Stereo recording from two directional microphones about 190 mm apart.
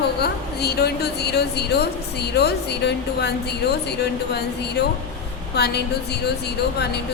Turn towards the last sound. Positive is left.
turn(degrees=60)  # may be behind; listen again after turning